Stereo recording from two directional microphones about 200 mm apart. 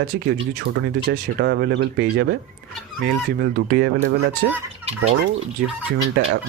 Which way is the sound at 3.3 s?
50° right (ahead or behind).